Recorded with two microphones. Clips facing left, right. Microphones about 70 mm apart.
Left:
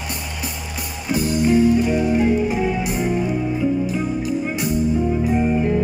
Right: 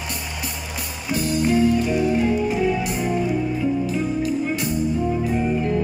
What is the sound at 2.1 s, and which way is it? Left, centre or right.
Music, centre.